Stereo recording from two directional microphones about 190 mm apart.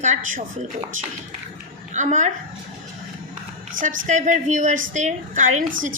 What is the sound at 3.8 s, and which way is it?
A woman's voice, 40° right (ahead or behind).